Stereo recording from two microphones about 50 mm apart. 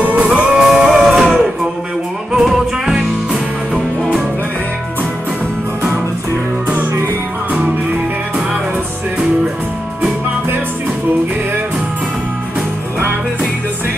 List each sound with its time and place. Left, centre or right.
0.0 s music: right
0.5 s music: centre